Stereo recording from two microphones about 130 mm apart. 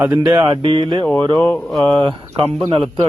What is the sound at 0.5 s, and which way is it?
Speech, 40° right (ahead or behind).